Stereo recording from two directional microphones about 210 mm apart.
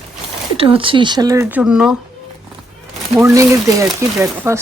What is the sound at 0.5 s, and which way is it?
Speech, 25° right (ahead or behind).